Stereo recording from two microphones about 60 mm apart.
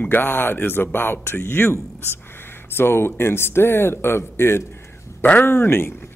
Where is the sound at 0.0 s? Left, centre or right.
Left.